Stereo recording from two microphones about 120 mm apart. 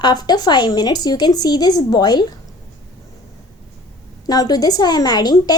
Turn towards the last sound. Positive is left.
turn(degrees=35)  # may be behind; listen again after turning